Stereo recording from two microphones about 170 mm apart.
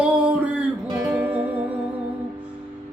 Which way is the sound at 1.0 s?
10° right (ahead or behind).